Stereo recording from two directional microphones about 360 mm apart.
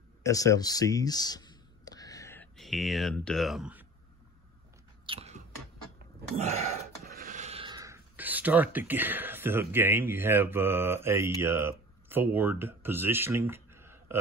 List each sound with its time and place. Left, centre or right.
0.2 s speech: centre
5.0 s a sound: centre
7.1 s speech: right; by 14.2 s centre